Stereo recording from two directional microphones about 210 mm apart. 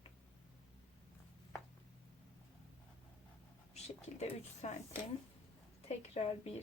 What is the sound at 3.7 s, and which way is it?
Speech, 30° left (ahead or behind).